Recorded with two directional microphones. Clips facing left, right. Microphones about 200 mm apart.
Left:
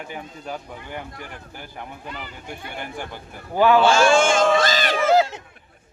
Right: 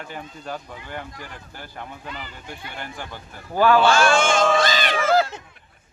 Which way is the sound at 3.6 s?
20° left (ahead or behind).